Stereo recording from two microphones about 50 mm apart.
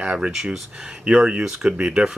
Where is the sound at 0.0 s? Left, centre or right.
Centre.